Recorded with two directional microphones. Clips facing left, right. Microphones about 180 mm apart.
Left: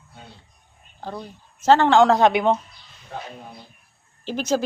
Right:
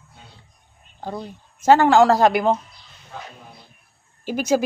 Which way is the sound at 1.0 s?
10° right (ahead or behind).